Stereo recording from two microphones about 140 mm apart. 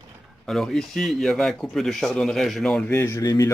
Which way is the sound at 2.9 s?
20° left (ahead or behind).